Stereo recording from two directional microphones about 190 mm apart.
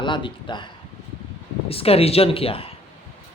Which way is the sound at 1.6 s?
30° left (ahead or behind).